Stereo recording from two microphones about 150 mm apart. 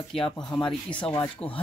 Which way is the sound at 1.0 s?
30° left (ahead or behind).